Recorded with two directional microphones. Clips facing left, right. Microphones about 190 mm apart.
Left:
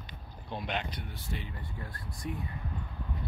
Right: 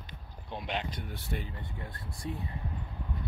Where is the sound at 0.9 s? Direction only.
50° right (ahead or behind).